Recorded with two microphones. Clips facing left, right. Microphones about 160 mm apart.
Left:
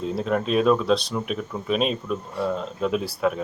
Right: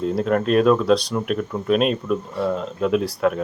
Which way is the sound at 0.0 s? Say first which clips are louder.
Right 4 dB; centre (ahead or behind).